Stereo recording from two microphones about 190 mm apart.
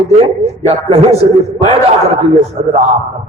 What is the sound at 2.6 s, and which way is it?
Speech, 40° right (ahead or behind).